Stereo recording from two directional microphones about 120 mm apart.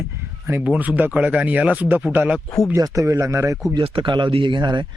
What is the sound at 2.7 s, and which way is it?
Speech, 30° right (ahead or behind).